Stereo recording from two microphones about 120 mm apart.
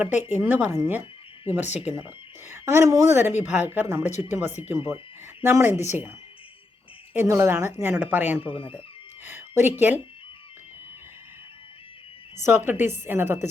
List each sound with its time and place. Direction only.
0.3 s a woman's voice: 15° right (ahead or behind)
8.4 s speech: 50° left (ahead or behind)
9.2 s speech: 20° right (ahead or behind)
12.4 s a woman's voice: 20° right (ahead or behind)